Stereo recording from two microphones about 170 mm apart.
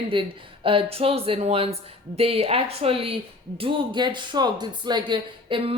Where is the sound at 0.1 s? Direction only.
30° right (ahead or behind).